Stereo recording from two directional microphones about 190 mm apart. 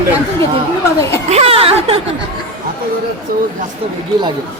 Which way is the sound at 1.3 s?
30° right (ahead or behind).